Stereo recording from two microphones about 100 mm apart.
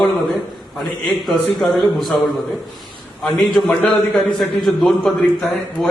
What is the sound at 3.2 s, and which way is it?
A man's voice, 5° left (ahead or behind).